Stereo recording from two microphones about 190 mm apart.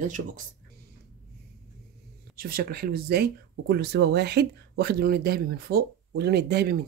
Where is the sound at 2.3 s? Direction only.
55° right (ahead or behind).